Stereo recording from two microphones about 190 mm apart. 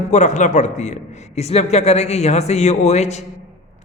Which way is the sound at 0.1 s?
40° left (ahead or behind).